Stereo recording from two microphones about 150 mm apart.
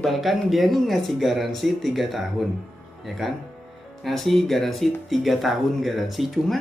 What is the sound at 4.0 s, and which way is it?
Speech, centre (ahead or behind).